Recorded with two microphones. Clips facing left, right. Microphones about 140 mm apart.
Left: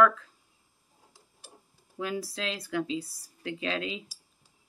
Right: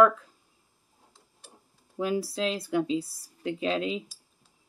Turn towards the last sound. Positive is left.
turn(degrees=-35)  # may be behind; listen again after turning